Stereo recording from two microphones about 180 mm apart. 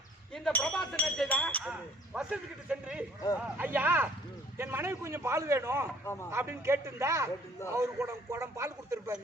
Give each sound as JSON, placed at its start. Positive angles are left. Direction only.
{"t": 0.3, "sound": "a man's voice", "side_deg": 5}